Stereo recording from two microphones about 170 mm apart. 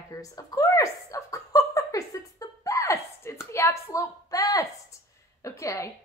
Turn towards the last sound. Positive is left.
turn(degrees=15)  # may be behind; listen again after turning